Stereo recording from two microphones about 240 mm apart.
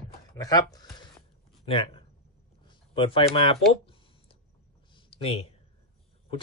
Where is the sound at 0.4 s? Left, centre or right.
Centre.